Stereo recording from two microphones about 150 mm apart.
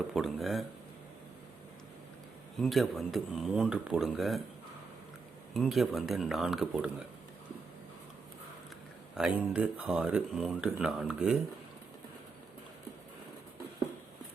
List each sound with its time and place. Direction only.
0.1 s speech: centre (ahead or behind)
2.6 s speech: centre (ahead or behind)
5.5 s speech: centre (ahead or behind)
9.1 s speech: 5° right (ahead or behind)